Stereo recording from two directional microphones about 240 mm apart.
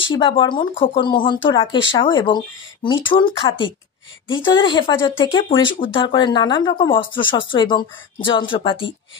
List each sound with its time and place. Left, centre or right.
0.0 s speech: left